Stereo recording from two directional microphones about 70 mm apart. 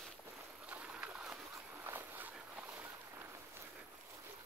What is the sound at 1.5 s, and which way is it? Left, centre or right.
Vehicle, right.